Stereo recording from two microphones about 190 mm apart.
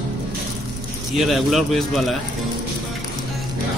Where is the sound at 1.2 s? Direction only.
Centre (ahead or behind).